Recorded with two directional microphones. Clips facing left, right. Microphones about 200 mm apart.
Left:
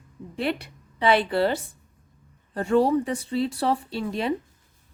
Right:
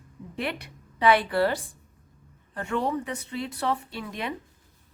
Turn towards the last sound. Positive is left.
turn(degrees=30)  # may be behind; listen again after turning